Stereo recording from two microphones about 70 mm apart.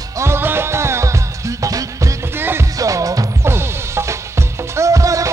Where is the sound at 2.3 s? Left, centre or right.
Right.